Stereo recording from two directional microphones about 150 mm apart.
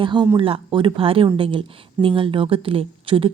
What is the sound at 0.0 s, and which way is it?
A woman's voice, 30° right (ahead or behind).